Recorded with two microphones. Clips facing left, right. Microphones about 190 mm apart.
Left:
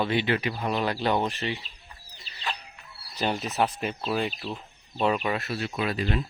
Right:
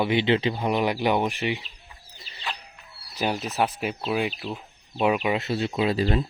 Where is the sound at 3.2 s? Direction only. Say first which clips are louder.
Right 1 dB; 5° right (ahead or behind); by 6.2 s 30° right (ahead or behind).